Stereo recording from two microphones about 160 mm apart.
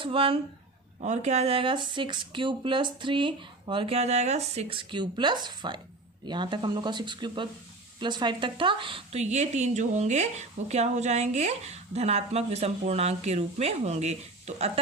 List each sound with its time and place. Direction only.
0.0 s speech: 35° right (ahead or behind)
1.0 s speech: 45° right (ahead or behind); by 9.0 s 30° right (ahead or behind)
9.1 s speech: 45° right (ahead or behind)